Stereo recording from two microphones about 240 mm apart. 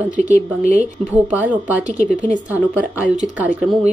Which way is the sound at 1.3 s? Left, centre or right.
Centre.